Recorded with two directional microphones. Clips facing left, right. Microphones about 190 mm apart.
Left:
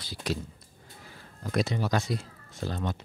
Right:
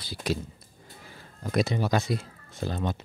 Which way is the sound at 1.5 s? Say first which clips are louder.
Right 2 dB; 15° right (ahead or behind).